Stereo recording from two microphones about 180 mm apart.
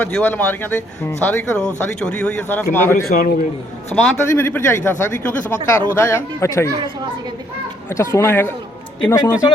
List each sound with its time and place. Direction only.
0.0 s speech: 10° left (ahead or behind)
3.1 s a man's voice: 55° left (ahead or behind)
3.9 s speech: 5° left (ahead or behind)
7.9 s speech: 15° left (ahead or behind)